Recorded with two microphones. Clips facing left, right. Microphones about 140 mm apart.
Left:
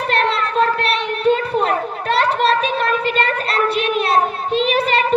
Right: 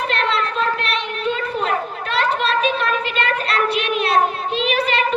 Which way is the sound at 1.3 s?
50° left (ahead or behind).